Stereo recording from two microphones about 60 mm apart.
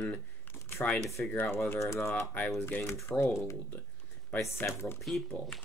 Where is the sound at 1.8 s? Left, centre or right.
Left.